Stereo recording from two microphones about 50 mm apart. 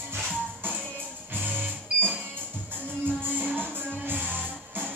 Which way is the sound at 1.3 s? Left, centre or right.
Right.